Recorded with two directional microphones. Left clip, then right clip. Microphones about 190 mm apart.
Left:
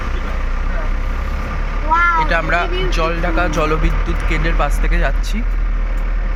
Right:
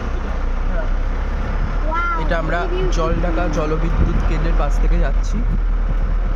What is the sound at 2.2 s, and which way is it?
Speech, 15° right (ahead or behind).